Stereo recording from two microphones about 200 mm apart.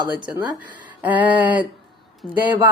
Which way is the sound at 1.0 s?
10° right (ahead or behind).